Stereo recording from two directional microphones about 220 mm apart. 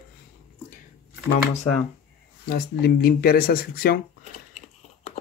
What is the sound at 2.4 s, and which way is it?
Speech, 45° left (ahead or behind).